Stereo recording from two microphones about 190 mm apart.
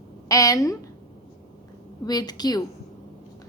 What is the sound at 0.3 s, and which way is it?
Speech, 15° left (ahead or behind).